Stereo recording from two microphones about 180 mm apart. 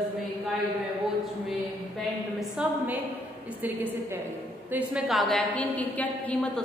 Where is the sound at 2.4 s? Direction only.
10° right (ahead or behind).